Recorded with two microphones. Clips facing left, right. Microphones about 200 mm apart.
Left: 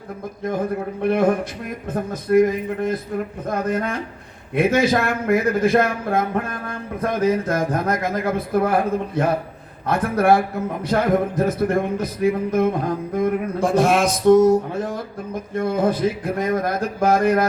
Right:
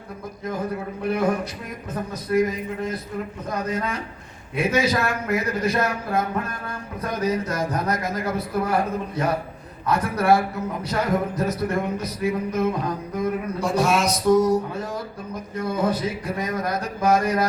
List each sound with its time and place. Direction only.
1.0 s a man's voice: 55° left (ahead or behind)